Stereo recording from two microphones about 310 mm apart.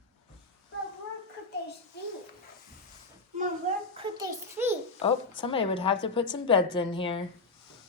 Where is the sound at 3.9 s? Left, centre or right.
Centre.